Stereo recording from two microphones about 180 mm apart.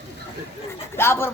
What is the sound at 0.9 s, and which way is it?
Speech, 15° left (ahead or behind).